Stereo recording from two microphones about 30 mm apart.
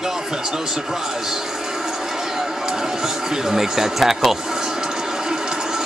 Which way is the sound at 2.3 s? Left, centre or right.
Centre.